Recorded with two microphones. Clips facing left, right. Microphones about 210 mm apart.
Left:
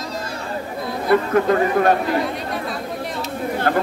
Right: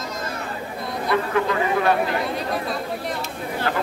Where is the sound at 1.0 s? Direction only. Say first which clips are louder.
Left 5 dB; 45° left (ahead or behind).